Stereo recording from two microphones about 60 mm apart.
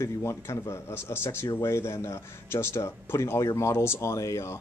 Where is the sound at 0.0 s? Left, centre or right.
Left.